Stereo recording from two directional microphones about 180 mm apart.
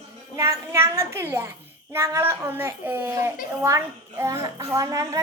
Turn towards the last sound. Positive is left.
turn(degrees=-20)  # may be behind; listen again after turning